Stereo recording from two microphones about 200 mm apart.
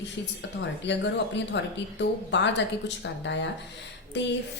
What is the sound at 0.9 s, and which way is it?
A woman's voice, 65° left (ahead or behind).